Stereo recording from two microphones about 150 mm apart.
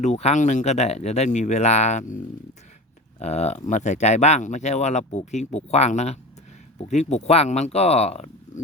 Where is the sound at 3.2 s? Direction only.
45° left (ahead or behind).